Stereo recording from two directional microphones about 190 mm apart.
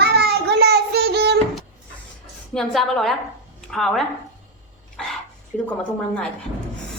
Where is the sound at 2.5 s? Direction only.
Centre (ahead or behind).